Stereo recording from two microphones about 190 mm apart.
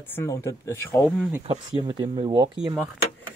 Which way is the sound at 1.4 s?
25° right (ahead or behind).